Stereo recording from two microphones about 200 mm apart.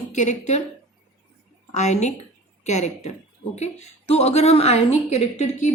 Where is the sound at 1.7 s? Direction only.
35° left (ahead or behind).